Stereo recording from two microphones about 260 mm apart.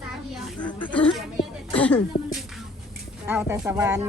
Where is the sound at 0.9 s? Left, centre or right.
Centre.